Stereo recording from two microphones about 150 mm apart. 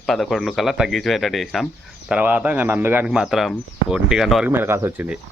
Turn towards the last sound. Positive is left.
turn(degrees=-10)  # may be behind; listen again after turning